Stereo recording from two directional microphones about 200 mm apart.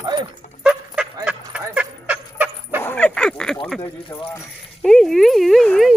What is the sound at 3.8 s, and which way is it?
Speech, 15° left (ahead or behind).